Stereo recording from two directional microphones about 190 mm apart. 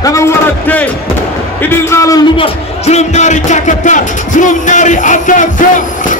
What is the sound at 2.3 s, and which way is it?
Speech, 30° left (ahead or behind).